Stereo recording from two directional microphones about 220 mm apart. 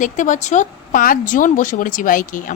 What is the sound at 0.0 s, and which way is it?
Speech, 35° left (ahead or behind).